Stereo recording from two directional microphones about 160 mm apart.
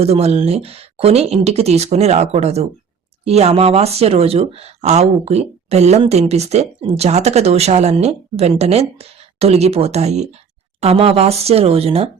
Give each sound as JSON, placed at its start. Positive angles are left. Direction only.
{"t": 0.0, "sound": "speech", "side_deg": -40}